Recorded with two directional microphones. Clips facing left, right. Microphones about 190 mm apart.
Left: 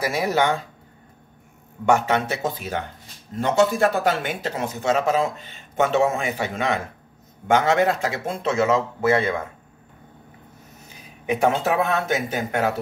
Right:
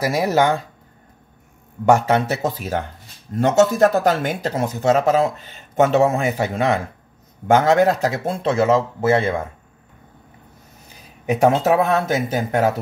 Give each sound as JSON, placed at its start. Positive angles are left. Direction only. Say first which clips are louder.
{"t": 0.0, "sound": "speech", "louder": "right 4 dB", "side_deg": -40}
{"t": 1.9, "sound": "speech", "louder": "right 4 dB", "side_deg": -40}
{"t": 11.2, "sound": "speech", "louder": "right 5 dB", "side_deg": -40}